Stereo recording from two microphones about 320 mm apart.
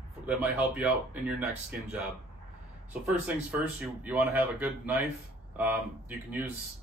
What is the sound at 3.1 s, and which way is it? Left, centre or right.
A man's voice, centre.